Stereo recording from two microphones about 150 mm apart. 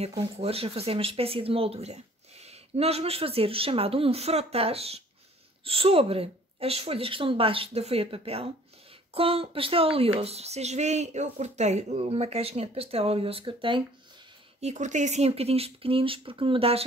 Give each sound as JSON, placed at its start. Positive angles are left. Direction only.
{"t": 0.2, "sound": "speech", "side_deg": -40}
{"t": 14.6, "sound": "speech", "side_deg": -50}